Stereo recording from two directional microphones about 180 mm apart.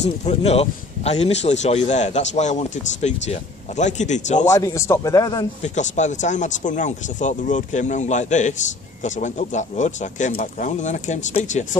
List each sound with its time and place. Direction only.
0.0 s a man's voice: 35° left (ahead or behind)
4.6 s speech: 15° left (ahead or behind)
5.6 s speech: 40° left (ahead or behind)